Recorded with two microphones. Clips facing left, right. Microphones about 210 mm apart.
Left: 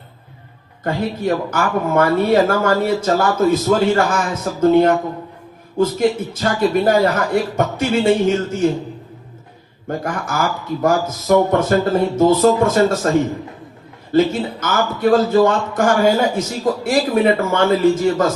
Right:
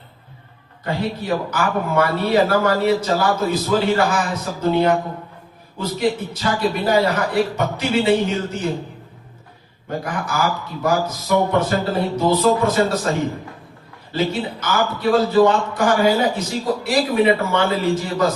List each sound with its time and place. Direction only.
0.9 s a man's voice: 50° left (ahead or behind)
10.0 s a man's voice: 50° left (ahead or behind)
14.1 s a man's voice: 50° left (ahead or behind)